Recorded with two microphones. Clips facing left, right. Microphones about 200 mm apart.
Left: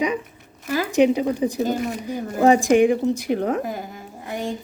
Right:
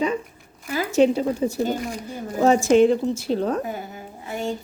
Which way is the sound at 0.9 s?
15° left (ahead or behind).